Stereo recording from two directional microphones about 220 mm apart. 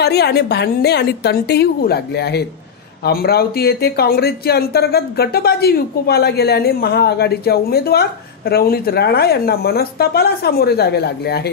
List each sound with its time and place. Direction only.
0.0 s speech: 45° left (ahead or behind)